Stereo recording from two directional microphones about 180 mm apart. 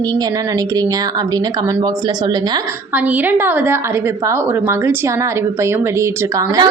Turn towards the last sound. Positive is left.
turn(degrees=-20)  # may be behind; listen again after turning